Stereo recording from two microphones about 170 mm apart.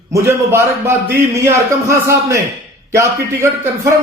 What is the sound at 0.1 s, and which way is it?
A man's voice, 15° right (ahead or behind).